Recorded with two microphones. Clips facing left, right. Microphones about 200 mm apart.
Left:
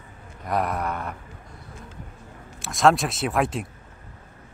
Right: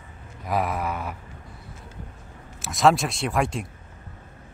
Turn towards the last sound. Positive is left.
turn(degrees=0)  # may be behind; listen again after turning